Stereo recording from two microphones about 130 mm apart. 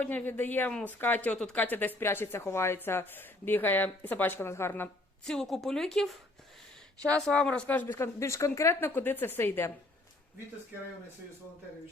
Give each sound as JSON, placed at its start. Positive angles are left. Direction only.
{"t": 0.0, "sound": "speech", "side_deg": 15}
{"t": 5.2, "sound": "a woman's voice", "side_deg": 5}